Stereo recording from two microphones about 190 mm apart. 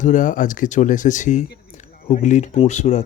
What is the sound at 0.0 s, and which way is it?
Speech, 45° left (ahead or behind).